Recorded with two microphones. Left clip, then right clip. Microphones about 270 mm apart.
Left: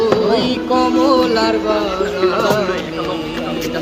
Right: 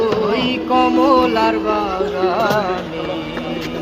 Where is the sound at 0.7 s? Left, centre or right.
Centre.